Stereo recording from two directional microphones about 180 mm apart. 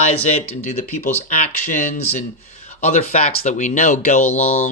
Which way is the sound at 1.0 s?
40° left (ahead or behind).